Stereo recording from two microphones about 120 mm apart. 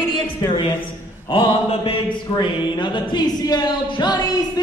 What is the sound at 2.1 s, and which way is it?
Speech, 40° left (ahead or behind).